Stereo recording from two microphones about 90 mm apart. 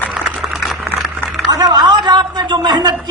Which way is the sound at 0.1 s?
5° right (ahead or behind).